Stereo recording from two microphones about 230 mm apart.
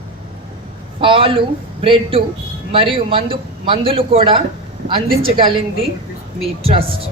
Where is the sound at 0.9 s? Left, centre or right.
Right.